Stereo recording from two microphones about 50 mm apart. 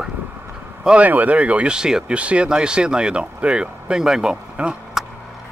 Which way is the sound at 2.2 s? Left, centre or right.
Right.